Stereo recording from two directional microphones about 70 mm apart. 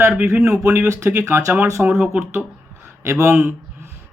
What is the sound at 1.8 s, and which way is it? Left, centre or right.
Speech, right.